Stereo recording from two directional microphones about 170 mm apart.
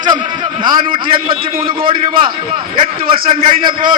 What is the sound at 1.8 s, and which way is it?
Speech, 30° right (ahead or behind).